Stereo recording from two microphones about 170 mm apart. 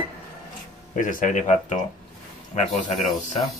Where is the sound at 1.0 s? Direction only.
50° left (ahead or behind).